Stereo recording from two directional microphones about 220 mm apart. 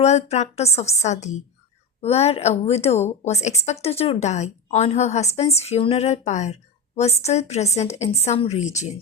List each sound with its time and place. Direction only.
0.0 s a woman's voice: 30° left (ahead or behind)